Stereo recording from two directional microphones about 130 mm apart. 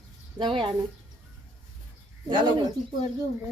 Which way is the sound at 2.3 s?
40° right (ahead or behind).